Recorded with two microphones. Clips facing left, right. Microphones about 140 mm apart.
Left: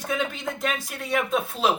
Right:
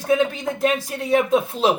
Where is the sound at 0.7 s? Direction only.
25° right (ahead or behind).